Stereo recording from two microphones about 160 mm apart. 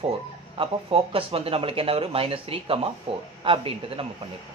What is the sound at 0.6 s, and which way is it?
Speech, 35° right (ahead or behind).